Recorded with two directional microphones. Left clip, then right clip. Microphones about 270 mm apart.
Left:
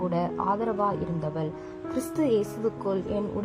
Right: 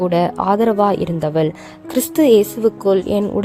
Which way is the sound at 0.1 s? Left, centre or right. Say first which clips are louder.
Right 11 dB; right.